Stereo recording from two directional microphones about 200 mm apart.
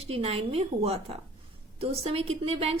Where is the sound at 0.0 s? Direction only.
30° right (ahead or behind).